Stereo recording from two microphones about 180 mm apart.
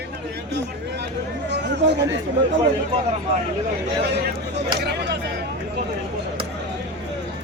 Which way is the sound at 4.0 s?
65° right (ahead or behind).